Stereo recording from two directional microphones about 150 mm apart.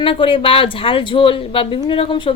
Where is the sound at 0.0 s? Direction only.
35° left (ahead or behind).